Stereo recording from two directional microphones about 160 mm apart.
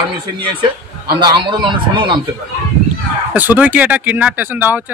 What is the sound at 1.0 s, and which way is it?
A man's voice, 30° right (ahead or behind).